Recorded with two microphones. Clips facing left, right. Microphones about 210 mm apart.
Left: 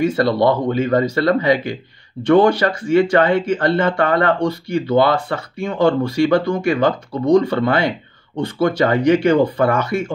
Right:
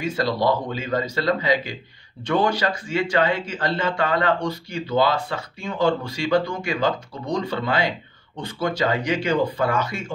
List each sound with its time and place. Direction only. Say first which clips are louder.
0.0 s speech: left 7 dB; 60° left (ahead or behind)